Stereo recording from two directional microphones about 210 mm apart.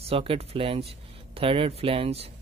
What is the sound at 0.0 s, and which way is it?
Speech, 25° right (ahead or behind).